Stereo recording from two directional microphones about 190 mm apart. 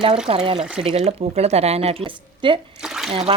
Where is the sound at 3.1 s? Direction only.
30° right (ahead or behind).